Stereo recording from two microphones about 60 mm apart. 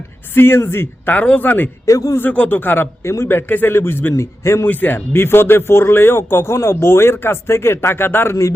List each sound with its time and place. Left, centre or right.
0.3 s speech: left
1.1 s speech: left
1.9 s a man's voice: left
2.3 s speech: left
3.0 s a man's voice: left
3.2 s speech: left
4.1 s a man's voice: left
4.6 s speech: left